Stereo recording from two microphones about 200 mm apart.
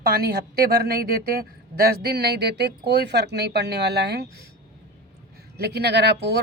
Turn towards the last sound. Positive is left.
turn(degrees=-55)  # may be behind; listen again after turning